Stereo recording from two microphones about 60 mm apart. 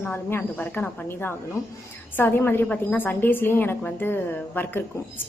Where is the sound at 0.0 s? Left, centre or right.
Left.